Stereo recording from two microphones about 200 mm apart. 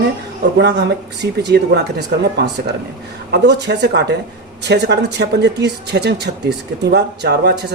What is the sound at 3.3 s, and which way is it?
Speech, 60° right (ahead or behind).